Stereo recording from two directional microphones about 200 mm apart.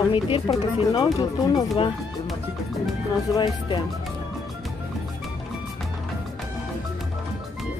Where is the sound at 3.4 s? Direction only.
25° left (ahead or behind).